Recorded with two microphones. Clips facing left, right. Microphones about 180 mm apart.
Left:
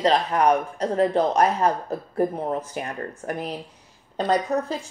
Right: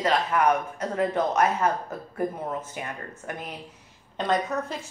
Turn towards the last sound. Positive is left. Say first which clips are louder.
# left 4 dB
turn(degrees=35)  # may be behind; listen again after turning